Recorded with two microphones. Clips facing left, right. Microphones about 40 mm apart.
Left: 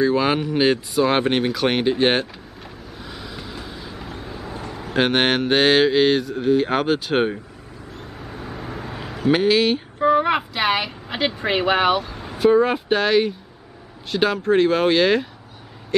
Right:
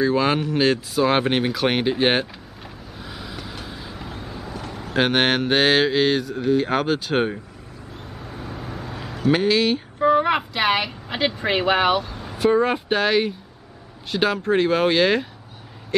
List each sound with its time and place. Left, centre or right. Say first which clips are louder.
0.0 s speech: left 1 dB; centre
3.0 s vehicle: even; centre
4.8 s speech: left 1 dB; centre
8.0 s a sound: left 1 dB; centre
14.1 s speech: left 2 dB; centre